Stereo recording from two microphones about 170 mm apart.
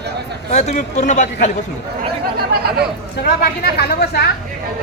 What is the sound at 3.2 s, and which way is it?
A woman's voice, 65° left (ahead or behind).